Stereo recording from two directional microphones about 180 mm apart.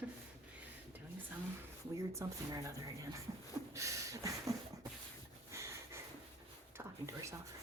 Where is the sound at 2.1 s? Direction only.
15° right (ahead or behind).